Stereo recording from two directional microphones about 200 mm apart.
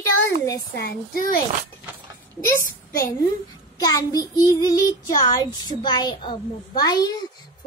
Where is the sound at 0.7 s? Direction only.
50° left (ahead or behind).